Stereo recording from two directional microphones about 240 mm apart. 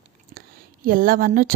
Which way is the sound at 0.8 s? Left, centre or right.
Right.